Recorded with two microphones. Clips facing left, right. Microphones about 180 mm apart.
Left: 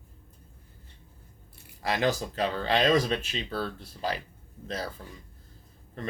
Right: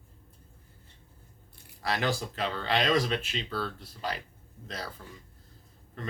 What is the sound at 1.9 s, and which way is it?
Speech, 20° left (ahead or behind).